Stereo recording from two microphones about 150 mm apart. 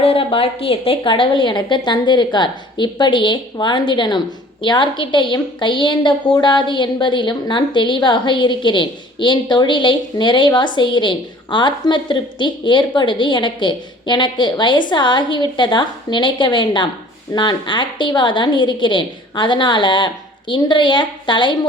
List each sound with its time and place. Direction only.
0.0 s a woman's voice: 40° left (ahead or behind)